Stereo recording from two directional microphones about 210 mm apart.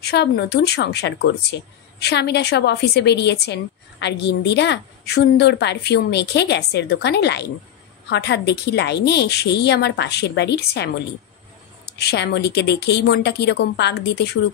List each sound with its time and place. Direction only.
0.0 s speech: 50° left (ahead or behind)
12.0 s speech: 50° left (ahead or behind)